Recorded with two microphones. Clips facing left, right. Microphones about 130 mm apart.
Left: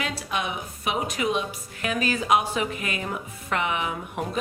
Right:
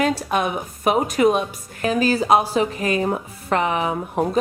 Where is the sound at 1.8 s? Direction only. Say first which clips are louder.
Right 6 dB; 35° right (ahead or behind).